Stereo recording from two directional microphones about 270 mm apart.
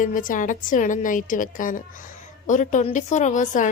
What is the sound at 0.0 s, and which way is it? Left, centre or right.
A woman's voice, left.